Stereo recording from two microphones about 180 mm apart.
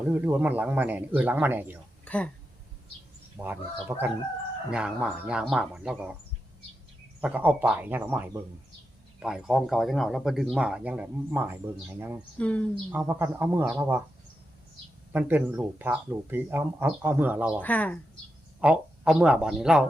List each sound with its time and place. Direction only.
0.1 s speech: 10° right (ahead or behind)
2.0 s speech: 5° left (ahead or behind)
3.3 s speech: 10° right (ahead or behind)
7.2 s speech: 10° right (ahead or behind)
9.2 s speech: 5° right (ahead or behind)
12.4 s speech: 5° left (ahead or behind)
12.9 s speech: 10° right (ahead or behind)
15.1 s speech: 10° right (ahead or behind)
17.6 s speech: 10° left (ahead or behind)
18.6 s speech: 5° right (ahead or behind)